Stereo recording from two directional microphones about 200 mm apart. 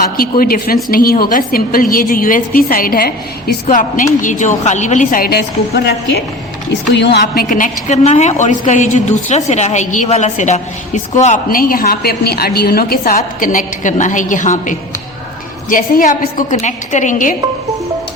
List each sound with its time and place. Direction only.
0.2 s a woman's voice: 45° left (ahead or behind)
7.4 s a woman's voice: 40° left (ahead or behind)
13.1 s a woman's voice: 40° left (ahead or behind)